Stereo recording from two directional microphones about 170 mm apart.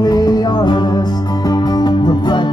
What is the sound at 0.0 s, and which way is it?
Music, 25° left (ahead or behind).